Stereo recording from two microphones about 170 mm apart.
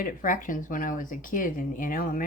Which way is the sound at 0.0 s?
50° left (ahead or behind).